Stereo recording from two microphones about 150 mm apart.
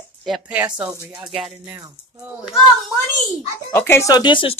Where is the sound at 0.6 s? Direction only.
10° right (ahead or behind).